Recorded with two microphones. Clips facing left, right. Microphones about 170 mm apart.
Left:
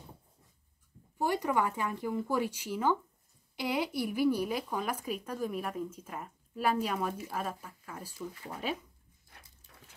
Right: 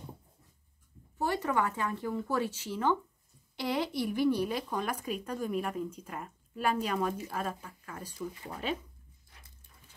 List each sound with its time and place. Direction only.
1.1 s speech: 15° left (ahead or behind)